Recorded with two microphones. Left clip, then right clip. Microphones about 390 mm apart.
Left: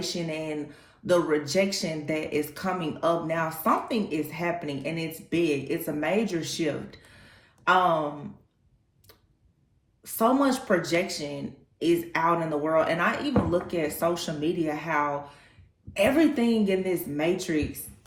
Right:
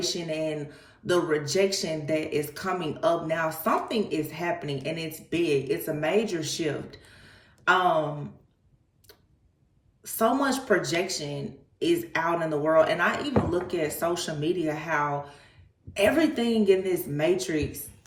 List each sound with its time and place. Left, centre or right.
0.0 s speech: centre
10.0 s speech: centre